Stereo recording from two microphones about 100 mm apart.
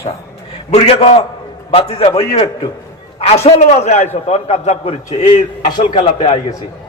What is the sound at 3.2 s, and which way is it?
A man's voice, 90° left.